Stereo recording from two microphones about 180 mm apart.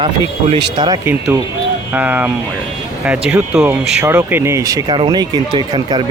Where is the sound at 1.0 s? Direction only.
10° right (ahead or behind).